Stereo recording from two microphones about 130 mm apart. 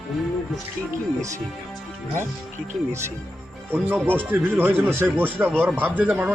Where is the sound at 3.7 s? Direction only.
15° right (ahead or behind).